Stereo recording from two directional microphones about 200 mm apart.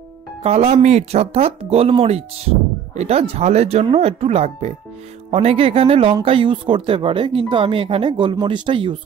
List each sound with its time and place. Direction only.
0.4 s speech: 30° right (ahead or behind)